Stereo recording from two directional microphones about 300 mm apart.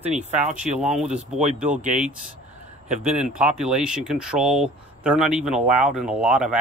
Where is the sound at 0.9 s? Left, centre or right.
Centre.